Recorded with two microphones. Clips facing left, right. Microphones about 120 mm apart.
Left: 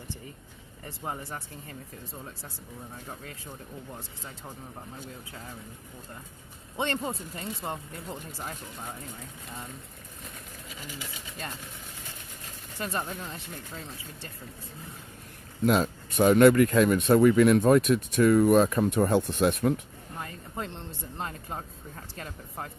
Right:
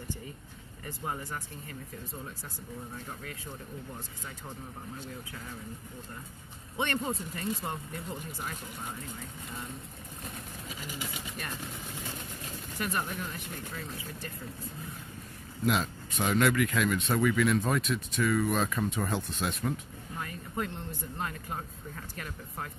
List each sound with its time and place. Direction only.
0.8 s speech: 20° left (ahead or behind)
6.8 s speech: 25° left (ahead or behind)
12.7 s speech: 30° left (ahead or behind)
15.6 s speech: 45° left (ahead or behind)
20.2 s speech: 25° left (ahead or behind)